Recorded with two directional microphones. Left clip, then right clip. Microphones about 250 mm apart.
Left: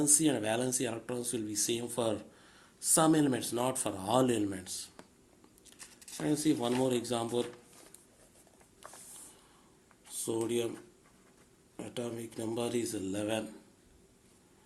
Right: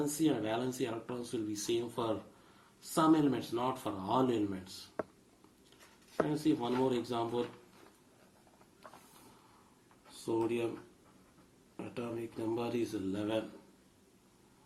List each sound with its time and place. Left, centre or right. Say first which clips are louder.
0.0 s speech: left 3 dB; left
6.2 s speech: left 6 dB; left
10.2 s speech: left 1 dB; left
11.9 s speech: left 1 dB; left